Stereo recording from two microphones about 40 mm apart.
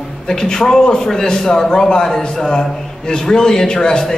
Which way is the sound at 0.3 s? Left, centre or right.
Centre.